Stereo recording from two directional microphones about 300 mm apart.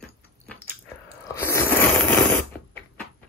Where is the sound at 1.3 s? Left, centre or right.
Centre.